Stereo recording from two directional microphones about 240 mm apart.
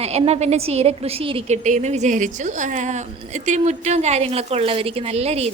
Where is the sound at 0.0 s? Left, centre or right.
Right.